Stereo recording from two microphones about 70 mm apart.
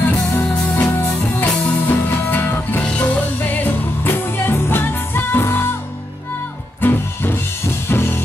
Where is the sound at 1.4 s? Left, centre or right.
Left.